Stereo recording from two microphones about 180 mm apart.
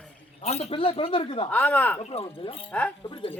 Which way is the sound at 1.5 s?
10° left (ahead or behind).